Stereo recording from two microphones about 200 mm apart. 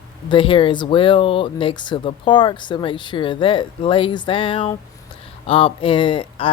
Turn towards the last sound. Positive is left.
turn(degrees=25)  # may be behind; listen again after turning